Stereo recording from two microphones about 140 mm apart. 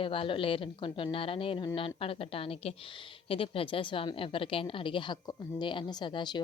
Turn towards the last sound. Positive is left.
turn(degrees=35)  # may be behind; listen again after turning